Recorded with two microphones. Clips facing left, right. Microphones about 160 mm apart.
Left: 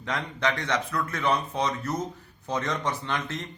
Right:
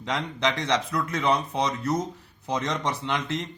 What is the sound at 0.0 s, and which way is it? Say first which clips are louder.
Speech: right 2 dB; 20° right (ahead or behind).